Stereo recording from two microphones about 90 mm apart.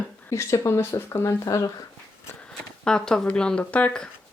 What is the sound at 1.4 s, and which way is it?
Speech, 40° left (ahead or behind).